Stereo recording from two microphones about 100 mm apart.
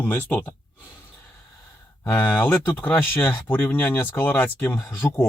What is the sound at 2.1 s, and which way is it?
Speech, 15° left (ahead or behind).